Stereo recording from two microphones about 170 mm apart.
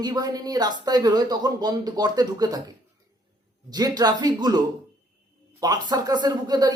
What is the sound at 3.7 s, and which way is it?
Speech, 25° right (ahead or behind).